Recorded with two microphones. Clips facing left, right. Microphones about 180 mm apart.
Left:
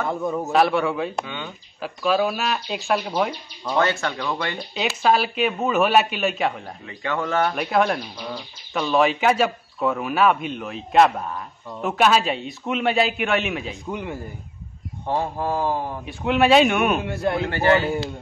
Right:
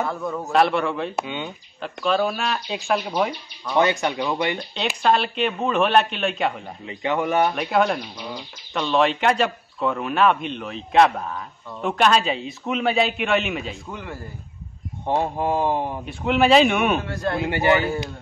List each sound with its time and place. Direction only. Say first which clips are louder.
0.1 s a man's voice: left 3 dB; 20° left (ahead or behind)
0.5 s speech: even; centre (ahead or behind)
1.2 s speech: right 3 dB; 20° right (ahead or behind)
1.8 s speech: left 1 dB; 5° left (ahead or behind)
3.7 s speech: right 2 dB; 15° right (ahead or behind)
5.0 s speech: left 1 dB; 5° left (ahead or behind)
6.9 s speech: right 3 dB; 20° right (ahead or behind)
7.5 s speech: even; centre (ahead or behind)
13.8 s a man's voice: left 5 dB; 20° left (ahead or behind)
15.0 s speech: right 2 dB; 20° right (ahead or behind)
16.1 s speech: even; centre (ahead or behind)
17.0 s a man's voice: left 2 dB; 20° left (ahead or behind)
17.4 s speech: right 1 dB; 15° right (ahead or behind)